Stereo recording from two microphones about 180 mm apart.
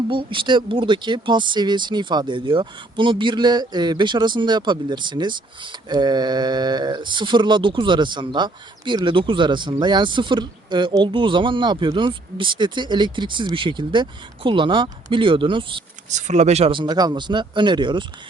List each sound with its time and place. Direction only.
0.1 s speech: 30° right (ahead or behind)
16.0 s speech: 40° right (ahead or behind)